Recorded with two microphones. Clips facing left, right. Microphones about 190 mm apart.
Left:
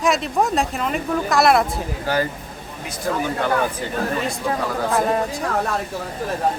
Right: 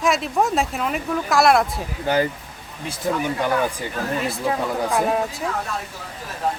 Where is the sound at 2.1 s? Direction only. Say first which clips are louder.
Right 3 dB; 20° right (ahead or behind).